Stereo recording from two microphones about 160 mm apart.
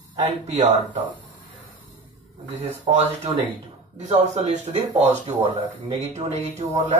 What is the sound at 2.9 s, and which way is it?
Speech, 35° right (ahead or behind).